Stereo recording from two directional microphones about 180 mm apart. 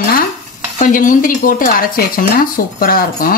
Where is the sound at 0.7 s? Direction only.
45° left (ahead or behind).